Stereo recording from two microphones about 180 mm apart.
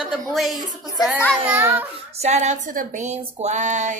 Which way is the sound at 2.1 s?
35° right (ahead or behind).